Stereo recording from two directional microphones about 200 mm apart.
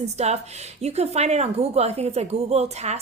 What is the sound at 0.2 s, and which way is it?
A woman's voice, 35° right (ahead or behind).